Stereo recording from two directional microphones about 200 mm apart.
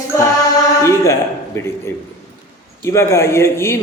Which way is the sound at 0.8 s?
15° left (ahead or behind).